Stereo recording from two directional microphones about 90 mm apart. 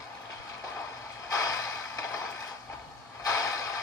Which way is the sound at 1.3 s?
35° left (ahead or behind).